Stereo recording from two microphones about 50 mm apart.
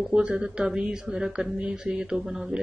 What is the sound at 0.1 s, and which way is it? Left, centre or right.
Speech, centre.